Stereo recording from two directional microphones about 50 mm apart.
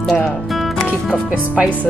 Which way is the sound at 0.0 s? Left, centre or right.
Centre.